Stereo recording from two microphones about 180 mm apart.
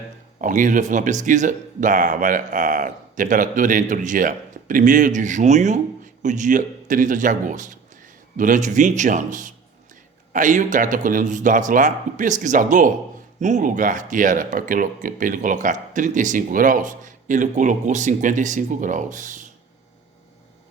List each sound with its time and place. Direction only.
0.4 s a man's voice: 45° right (ahead or behind)